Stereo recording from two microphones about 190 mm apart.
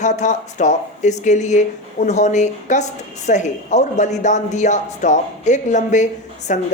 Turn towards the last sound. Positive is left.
turn(degrees=40)  # may be behind; listen again after turning